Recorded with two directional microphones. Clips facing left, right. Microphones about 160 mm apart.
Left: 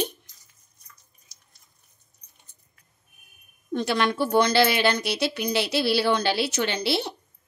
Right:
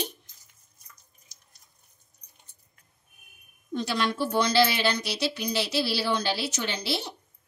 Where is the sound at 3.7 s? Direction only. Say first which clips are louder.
Left 4 dB; 60° left (ahead or behind).